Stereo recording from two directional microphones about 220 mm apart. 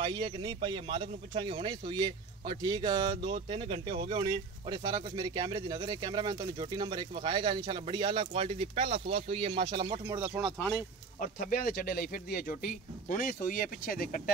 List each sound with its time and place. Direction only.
0.0 s speech: 20° right (ahead or behind)
11.1 s speech: 40° left (ahead or behind)